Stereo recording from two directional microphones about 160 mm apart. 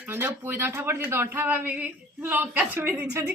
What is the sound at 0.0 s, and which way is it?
Speech, 10° right (ahead or behind).